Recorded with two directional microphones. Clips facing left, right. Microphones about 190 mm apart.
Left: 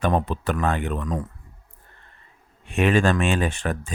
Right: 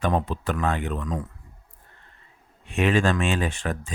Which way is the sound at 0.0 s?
60° left (ahead or behind).